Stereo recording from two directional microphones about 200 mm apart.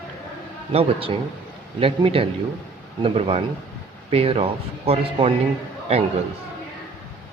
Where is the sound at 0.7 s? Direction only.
30° right (ahead or behind).